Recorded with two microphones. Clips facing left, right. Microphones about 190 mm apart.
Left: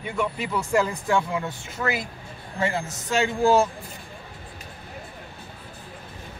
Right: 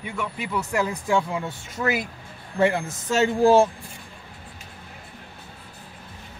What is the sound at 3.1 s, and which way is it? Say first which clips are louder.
Speech: right 3 dB; 35° right (ahead or behind).